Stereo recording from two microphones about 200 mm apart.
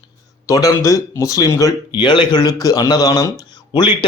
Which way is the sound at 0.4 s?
15° left (ahead or behind).